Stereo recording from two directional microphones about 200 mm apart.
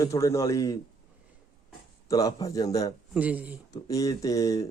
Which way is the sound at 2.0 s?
15° left (ahead or behind).